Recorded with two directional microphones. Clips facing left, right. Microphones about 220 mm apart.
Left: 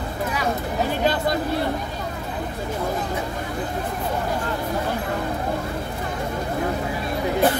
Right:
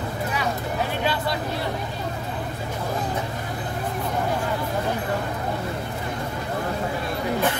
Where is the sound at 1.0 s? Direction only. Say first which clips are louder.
Left 6 dB; 45° left (ahead or behind).